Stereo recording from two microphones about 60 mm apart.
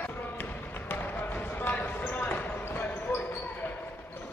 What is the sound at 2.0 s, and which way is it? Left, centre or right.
Basketball bounce, left.